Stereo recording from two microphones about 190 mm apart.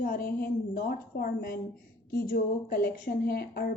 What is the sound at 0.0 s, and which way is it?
A woman's voice, 50° left (ahead or behind).